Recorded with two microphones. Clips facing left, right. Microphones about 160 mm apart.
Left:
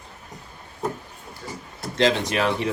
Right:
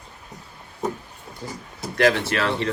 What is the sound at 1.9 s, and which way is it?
Speech, 20° left (ahead or behind).